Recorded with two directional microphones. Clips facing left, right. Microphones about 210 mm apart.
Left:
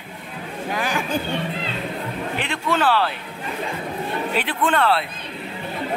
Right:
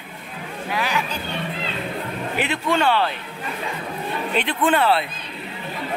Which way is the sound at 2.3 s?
5° right (ahead or behind).